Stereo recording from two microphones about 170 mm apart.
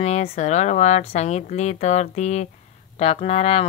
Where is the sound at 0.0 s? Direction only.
40° left (ahead or behind).